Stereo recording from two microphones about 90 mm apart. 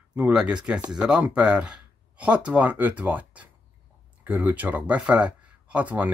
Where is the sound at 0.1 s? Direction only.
10° right (ahead or behind).